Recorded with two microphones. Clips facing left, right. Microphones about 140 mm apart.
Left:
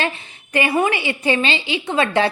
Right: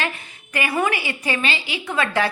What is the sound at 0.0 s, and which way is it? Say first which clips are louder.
A woman's voice: left 3 dB; 25° left (ahead or behind).